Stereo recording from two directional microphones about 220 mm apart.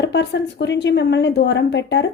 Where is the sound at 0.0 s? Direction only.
50° left (ahead or behind).